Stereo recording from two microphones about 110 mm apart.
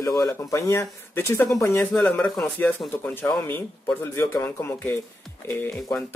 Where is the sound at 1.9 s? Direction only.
10° left (ahead or behind).